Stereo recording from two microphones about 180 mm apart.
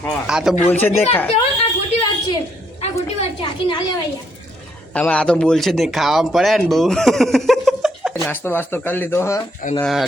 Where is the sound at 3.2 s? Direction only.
25° left (ahead or behind).